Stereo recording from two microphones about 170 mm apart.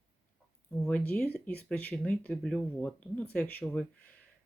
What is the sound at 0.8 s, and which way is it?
Speech, 5° left (ahead or behind).